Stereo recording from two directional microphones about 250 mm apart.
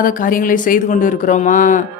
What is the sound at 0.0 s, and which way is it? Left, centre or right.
Speech, left.